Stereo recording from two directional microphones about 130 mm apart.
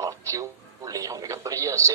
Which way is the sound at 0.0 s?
25° right (ahead or behind).